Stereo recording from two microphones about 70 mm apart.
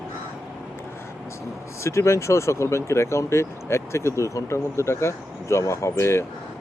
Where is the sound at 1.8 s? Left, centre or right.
Left.